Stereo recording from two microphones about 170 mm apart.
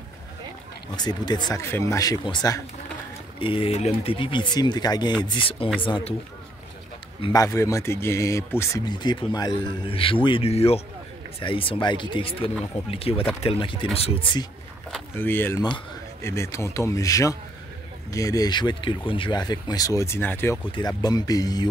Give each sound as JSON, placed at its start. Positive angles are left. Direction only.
{"t": 0.9, "sound": "speech", "side_deg": 25}
{"t": 7.2, "sound": "speech", "side_deg": 30}
{"t": 7.4, "sound": "speech", "side_deg": 15}
{"t": 15.1, "sound": "speech", "side_deg": 10}
{"t": 20.7, "sound": "speech", "side_deg": 25}